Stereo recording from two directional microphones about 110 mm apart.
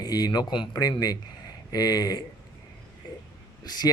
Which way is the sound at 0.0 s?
35° left (ahead or behind).